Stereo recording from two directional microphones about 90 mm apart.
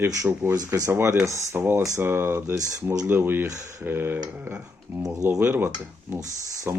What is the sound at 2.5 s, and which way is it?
Speech, 40° right (ahead or behind).